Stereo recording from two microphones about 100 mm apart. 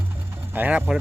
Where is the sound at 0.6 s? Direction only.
15° right (ahead or behind).